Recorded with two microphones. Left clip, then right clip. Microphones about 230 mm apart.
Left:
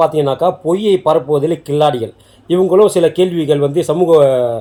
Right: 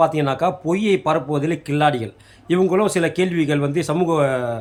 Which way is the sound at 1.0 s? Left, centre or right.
Right.